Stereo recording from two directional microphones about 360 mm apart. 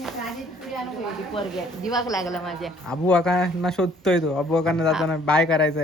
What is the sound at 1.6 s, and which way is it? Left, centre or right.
Speech, centre.